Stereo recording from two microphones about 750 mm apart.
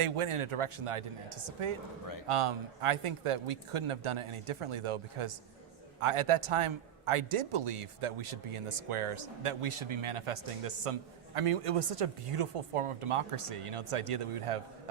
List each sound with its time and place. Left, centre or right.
0.0 s a man's voice: right